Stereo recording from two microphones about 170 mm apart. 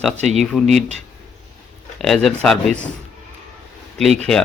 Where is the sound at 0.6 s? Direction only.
45° right (ahead or behind).